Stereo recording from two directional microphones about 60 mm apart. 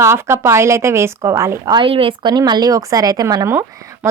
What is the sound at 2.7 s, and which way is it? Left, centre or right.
Speech, right.